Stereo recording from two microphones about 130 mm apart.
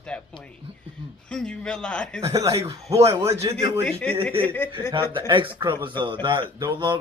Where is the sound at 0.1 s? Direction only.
10° left (ahead or behind).